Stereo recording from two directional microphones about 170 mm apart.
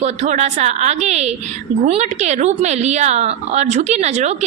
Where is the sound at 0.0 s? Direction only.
40° right (ahead or behind).